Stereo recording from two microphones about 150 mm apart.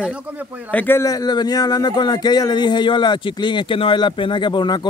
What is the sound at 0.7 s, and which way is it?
Speech, 10° left (ahead or behind).